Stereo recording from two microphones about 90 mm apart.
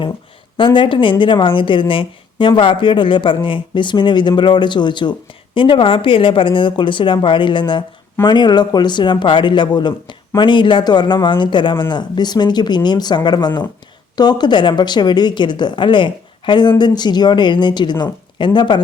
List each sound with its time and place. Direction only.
0.5 s speech: 65° left (ahead or behind)